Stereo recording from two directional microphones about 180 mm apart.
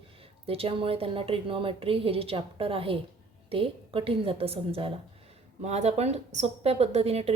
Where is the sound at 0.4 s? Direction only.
30° right (ahead or behind).